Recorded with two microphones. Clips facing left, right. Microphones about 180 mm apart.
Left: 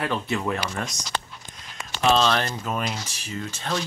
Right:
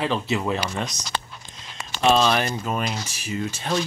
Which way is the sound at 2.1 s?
10° right (ahead or behind).